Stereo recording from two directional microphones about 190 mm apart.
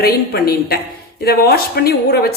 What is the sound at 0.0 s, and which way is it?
A woman's voice, 55° left (ahead or behind).